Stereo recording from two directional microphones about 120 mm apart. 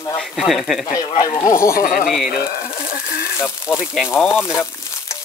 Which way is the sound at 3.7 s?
5° right (ahead or behind).